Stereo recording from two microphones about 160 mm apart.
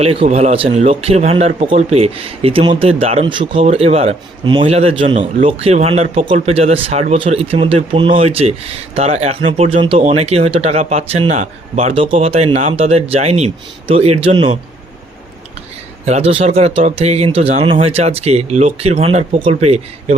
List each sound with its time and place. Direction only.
0.0 s speech: 40° right (ahead or behind)
16.0 s speech: 40° right (ahead or behind)